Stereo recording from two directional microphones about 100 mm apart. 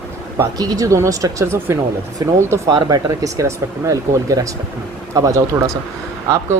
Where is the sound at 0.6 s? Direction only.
35° right (ahead or behind).